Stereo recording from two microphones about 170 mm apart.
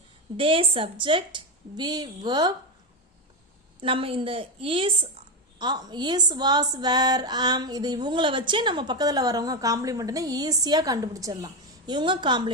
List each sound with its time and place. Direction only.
0.3 s a woman's voice: 30° right (ahead or behind)
3.8 s a woman's voice: 30° right (ahead or behind)